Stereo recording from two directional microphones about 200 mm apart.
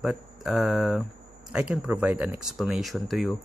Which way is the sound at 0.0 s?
5° right (ahead or behind).